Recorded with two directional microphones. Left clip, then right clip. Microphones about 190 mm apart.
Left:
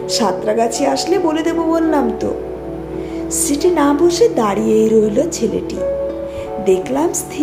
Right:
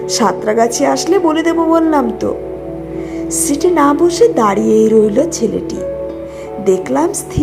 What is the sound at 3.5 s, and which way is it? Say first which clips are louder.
A woman's voice: right 3 dB; 15° right (ahead or behind).